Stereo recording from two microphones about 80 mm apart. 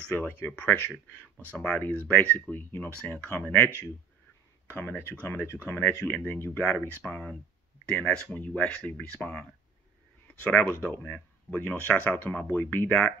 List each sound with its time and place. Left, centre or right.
0.0 s speech: left